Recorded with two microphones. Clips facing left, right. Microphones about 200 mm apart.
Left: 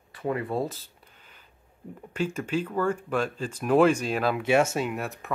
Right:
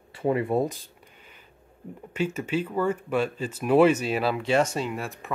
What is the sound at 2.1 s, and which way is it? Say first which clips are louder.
Speech: right 1 dB; 10° right (ahead or behind).